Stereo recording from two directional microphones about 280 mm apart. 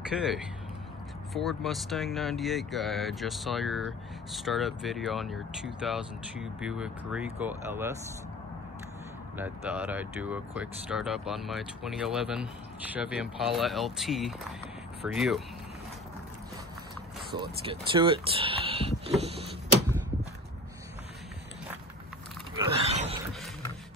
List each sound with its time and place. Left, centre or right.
0.1 s speech: centre
9.4 s speech: centre
17.4 s speech: centre
22.6 s a sound: right